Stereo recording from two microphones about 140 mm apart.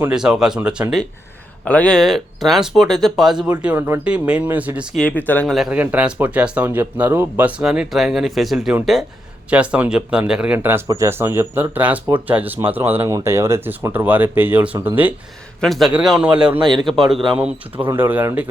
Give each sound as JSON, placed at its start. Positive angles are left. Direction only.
{"t": 0.1, "sound": "speech", "side_deg": -5}
{"t": 1.6, "sound": "speech", "side_deg": 10}
{"t": 4.9, "sound": "speech", "side_deg": 10}
{"t": 5.5, "sound": "speech", "side_deg": 0}
{"t": 15.6, "sound": "speech", "side_deg": 0}
{"t": 16.6, "sound": "a man's voice", "side_deg": -35}
{"t": 17.3, "sound": "speech", "side_deg": -10}